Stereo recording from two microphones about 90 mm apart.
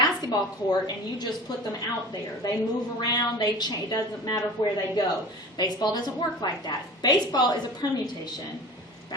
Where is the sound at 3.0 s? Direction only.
50° left (ahead or behind).